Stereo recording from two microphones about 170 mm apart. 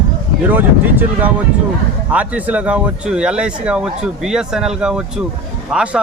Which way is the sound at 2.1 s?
10° right (ahead or behind).